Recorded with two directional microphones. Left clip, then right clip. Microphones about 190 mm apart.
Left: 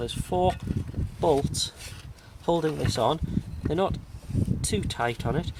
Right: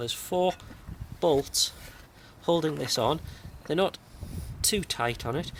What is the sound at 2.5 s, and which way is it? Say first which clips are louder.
Speech: even; 25° left (ahead or behind).